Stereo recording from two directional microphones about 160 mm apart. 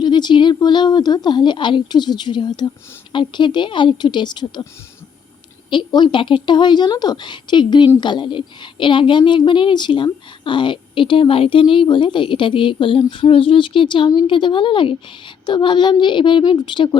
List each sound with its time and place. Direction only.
0.0 s a woman's voice: 30° left (ahead or behind)
5.7 s a woman's voice: 30° left (ahead or behind)